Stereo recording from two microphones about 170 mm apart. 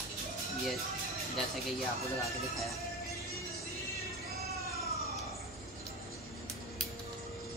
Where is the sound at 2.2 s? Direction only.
Centre (ahead or behind).